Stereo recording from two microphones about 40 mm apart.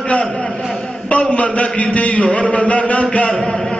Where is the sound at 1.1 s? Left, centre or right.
Left.